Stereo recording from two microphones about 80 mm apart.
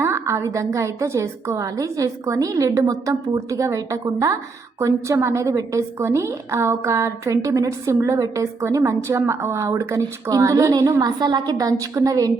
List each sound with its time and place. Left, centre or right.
0.0 s a woman's voice: right
11.0 s a woman's voice: right